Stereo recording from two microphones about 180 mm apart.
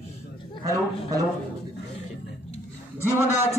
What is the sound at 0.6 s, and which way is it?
Speech, 20° right (ahead or behind).